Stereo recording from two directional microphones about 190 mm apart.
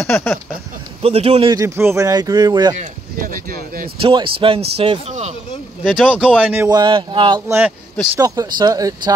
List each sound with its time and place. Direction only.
0.0 s a sound: 10° left (ahead or behind)
1.0 s speech: 30° right (ahead or behind)
1.5 s speech: 15° right (ahead or behind)
2.8 s a sound: 45° right (ahead or behind)
4.0 s speech: 25° right (ahead or behind)
5.9 s speech: 5° right (ahead or behind)
6.7 s speech: 20° right (ahead or behind)